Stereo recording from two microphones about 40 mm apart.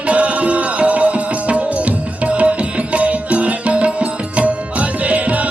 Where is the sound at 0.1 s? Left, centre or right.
Right.